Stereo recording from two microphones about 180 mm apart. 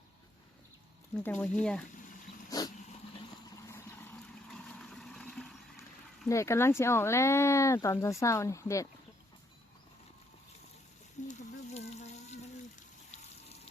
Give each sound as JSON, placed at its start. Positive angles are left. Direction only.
{"t": 1.1, "sound": "speech", "side_deg": 10}
{"t": 2.5, "sound": "dog", "side_deg": 20}
{"t": 3.5, "sound": "vehicle", "side_deg": 15}
{"t": 6.2, "sound": "speech", "side_deg": 15}
{"t": 11.3, "sound": "a sound", "side_deg": 35}